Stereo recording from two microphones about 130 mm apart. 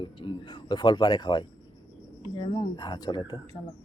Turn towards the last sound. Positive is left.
turn(degrees=35)  # may be behind; listen again after turning